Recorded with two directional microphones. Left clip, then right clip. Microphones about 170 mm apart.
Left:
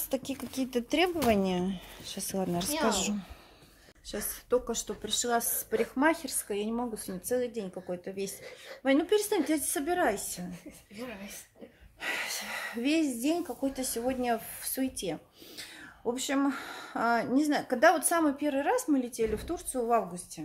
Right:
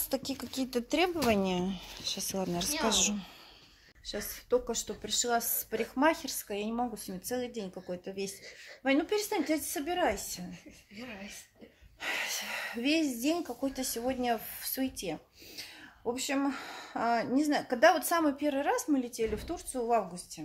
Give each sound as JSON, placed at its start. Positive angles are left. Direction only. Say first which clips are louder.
{"t": 0.1, "sound": "a woman's voice", "louder": "left 1 dB", "side_deg": 0}
{"t": 10.5, "sound": "speech", "louder": "left 3 dB", "side_deg": 65}
{"t": 12.0, "sound": "speech", "louder": "even", "side_deg": 0}